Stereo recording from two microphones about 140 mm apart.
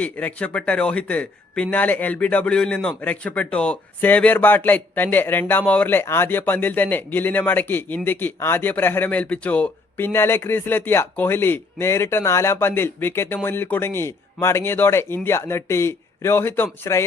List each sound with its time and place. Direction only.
0.0 s a man's voice: 10° left (ahead or behind)